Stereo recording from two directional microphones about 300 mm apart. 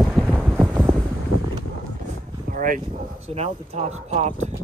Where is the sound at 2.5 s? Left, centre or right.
Right.